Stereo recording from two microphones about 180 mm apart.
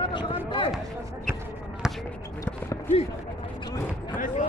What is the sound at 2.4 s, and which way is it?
Basketball bounce, 10° left (ahead or behind).